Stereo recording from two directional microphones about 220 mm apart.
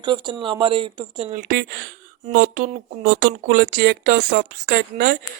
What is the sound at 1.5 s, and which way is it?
Speech, 45° right (ahead or behind).